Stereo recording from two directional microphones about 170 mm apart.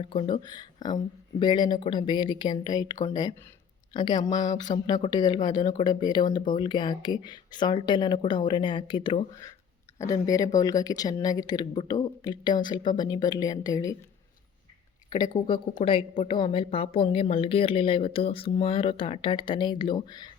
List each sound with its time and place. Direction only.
0.0 s speech: 30° left (ahead or behind)
15.1 s a woman's voice: 25° left (ahead or behind)